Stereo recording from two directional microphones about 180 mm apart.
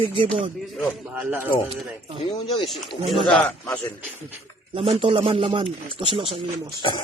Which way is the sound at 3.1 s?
Centre (ahead or behind).